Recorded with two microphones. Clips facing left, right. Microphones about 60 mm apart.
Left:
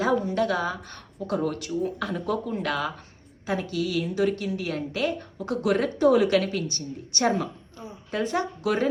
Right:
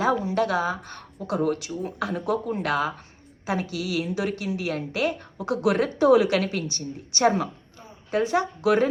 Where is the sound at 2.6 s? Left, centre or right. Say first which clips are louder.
Right 3 dB; right.